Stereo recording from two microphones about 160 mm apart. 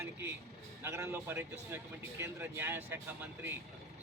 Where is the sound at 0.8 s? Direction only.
15° right (ahead or behind).